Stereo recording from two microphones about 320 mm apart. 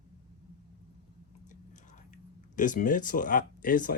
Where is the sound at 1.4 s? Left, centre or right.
Left.